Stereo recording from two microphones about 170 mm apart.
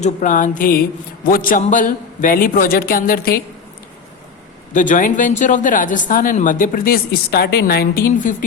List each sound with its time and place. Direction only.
0.0 s a woman's voice: 50° left (ahead or behind)
4.7 s speech: 50° left (ahead or behind)